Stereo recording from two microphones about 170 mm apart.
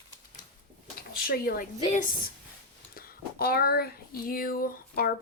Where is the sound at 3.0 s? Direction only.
60° left (ahead or behind).